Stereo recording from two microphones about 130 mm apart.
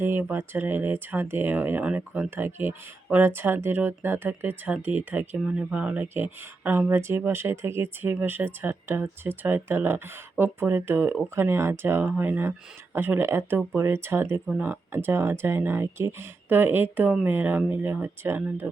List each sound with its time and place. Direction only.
0.0 s speech: 20° right (ahead or behind)